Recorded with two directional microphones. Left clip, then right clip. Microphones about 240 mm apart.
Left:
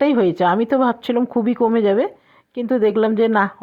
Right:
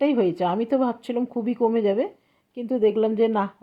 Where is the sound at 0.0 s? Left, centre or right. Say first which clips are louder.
Left 6 dB; centre.